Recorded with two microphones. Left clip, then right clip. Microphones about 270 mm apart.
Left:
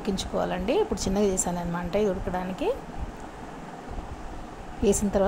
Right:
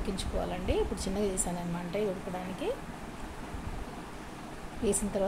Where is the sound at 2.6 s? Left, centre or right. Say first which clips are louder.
Left 7 dB; left.